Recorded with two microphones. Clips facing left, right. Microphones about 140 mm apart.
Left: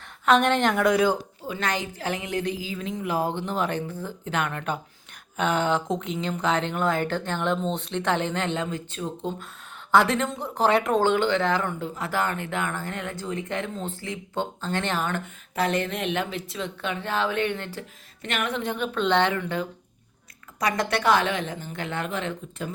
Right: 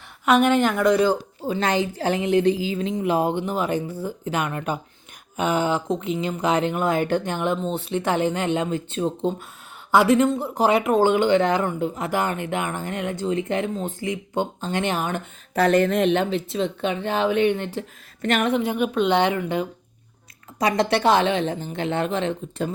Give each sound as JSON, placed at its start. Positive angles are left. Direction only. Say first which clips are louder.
{"t": 0.3, "sound": "speech", "louder": "right 2 dB", "side_deg": -10}
{"t": 1.4, "sound": "a woman's voice", "louder": "right 6 dB", "side_deg": -30}
{"t": 9.9, "sound": "speech", "louder": "right 5 dB", "side_deg": -10}
{"t": 15.5, "sound": "a woman's voice", "louder": "right 8 dB", "side_deg": -45}
{"t": 18.2, "sound": "music", "louder": "right 7 dB", "side_deg": -40}
{"t": 18.5, "sound": "a woman's voice", "louder": "right 6 dB", "side_deg": -10}